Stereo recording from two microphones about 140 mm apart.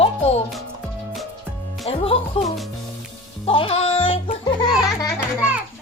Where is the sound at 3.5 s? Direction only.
40° left (ahead or behind).